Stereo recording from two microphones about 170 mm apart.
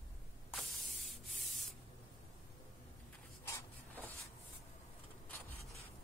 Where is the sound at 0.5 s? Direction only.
Centre (ahead or behind).